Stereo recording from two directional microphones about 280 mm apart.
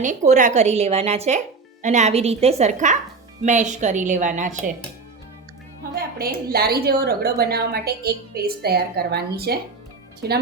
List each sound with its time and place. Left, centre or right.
0.0 s a woman's voice: right
6.0 s a woman's voice: right